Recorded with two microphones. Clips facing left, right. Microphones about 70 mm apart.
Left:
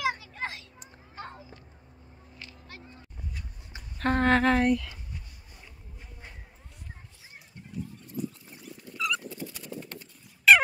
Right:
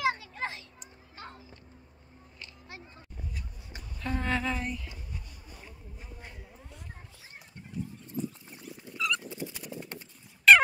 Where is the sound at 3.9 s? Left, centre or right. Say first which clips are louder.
Left 8 dB; left.